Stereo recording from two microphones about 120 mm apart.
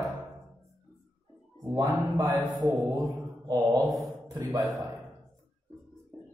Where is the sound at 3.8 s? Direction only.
Centre (ahead or behind).